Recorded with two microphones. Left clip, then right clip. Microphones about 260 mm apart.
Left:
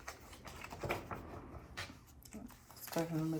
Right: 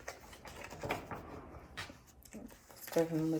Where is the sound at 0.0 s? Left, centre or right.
Centre.